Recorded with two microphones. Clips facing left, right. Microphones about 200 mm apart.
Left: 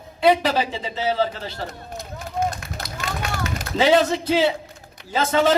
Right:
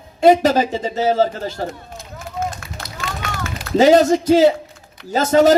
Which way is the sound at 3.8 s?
45° right (ahead or behind).